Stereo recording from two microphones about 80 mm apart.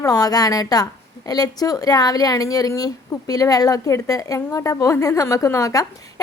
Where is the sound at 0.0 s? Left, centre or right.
Left.